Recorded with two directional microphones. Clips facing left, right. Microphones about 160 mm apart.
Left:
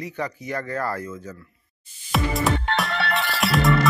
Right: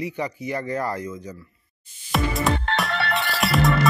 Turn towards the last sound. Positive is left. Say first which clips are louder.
# even
turn(degrees=0)  # may be behind; listen again after turning